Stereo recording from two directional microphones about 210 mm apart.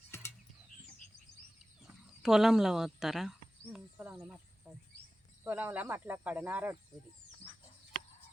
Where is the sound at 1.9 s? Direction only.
Centre (ahead or behind).